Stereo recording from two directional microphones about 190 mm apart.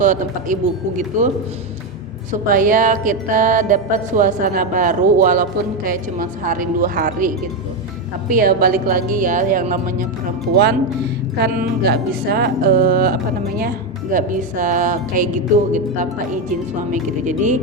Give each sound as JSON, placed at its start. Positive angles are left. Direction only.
{"t": 0.0, "sound": "music", "side_deg": -45}
{"t": 2.5, "sound": "music", "side_deg": -45}
{"t": 11.3, "sound": "music", "side_deg": -50}